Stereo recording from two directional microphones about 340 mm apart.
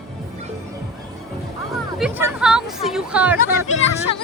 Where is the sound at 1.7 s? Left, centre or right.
Centre.